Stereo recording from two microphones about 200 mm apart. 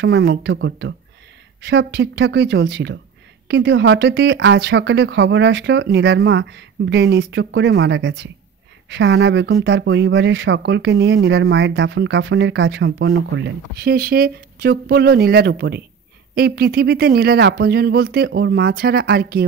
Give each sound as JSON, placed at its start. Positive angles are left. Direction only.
{"t": 0.0, "sound": "speech", "side_deg": -55}